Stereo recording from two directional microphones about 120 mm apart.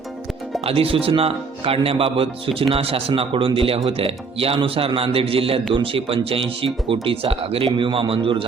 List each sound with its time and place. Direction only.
0.6 s speech: 50° right (ahead or behind)